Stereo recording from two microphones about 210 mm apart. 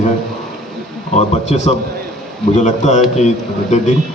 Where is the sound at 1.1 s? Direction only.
30° left (ahead or behind).